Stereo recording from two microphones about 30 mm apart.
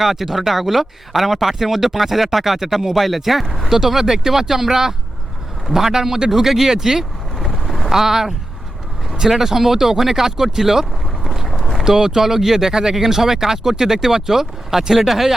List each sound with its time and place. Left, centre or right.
0.0 s speech: centre
7.3 s boat: centre
7.9 s speech: centre
9.4 s speech: centre
11.4 s a sound: centre
11.9 s speech: centre